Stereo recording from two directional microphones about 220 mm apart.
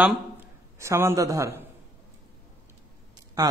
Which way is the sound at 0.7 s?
10° right (ahead or behind).